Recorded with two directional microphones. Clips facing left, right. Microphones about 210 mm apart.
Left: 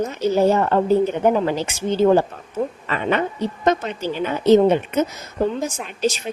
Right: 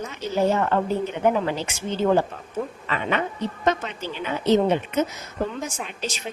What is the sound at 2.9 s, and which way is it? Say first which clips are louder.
A woman's voice: left 3 dB; 40° left (ahead or behind).